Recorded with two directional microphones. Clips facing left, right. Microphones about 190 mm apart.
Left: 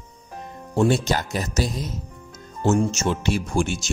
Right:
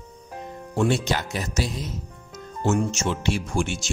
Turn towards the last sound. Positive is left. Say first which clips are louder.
# left 3 dB
turn(degrees=40)  # may be behind; listen again after turning